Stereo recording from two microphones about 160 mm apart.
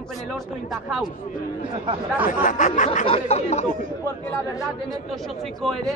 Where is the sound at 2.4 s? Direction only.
55° left (ahead or behind).